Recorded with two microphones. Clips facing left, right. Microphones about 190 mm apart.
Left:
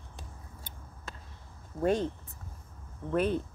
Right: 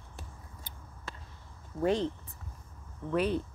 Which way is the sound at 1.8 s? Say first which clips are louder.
Left 1 dB; 50° left (ahead or behind).